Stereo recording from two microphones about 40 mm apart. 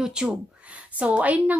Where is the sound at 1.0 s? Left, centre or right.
Right.